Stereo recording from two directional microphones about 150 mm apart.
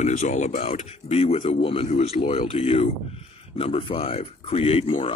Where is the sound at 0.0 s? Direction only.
55° left (ahead or behind).